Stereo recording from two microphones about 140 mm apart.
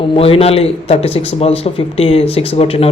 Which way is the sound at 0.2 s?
45° left (ahead or behind).